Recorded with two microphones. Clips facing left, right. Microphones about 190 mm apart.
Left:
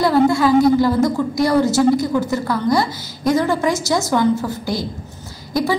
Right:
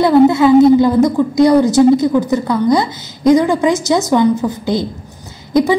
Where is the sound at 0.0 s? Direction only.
20° right (ahead or behind).